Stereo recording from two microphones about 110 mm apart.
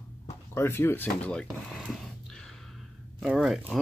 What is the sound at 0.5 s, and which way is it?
Speech, 20° left (ahead or behind).